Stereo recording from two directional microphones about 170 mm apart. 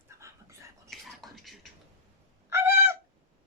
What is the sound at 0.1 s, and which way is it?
Whispering, 15° right (ahead or behind).